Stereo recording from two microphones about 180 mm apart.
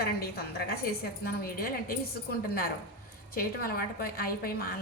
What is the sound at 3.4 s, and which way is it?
A woman's voice, 55° left (ahead or behind).